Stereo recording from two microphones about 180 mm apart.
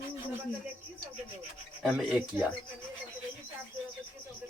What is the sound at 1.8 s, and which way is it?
Speech, centre (ahead or behind).